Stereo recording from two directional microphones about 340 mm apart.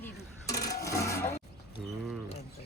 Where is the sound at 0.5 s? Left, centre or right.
Left.